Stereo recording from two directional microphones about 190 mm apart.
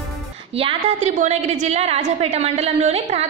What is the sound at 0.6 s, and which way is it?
A woman's voice, 30° right (ahead or behind).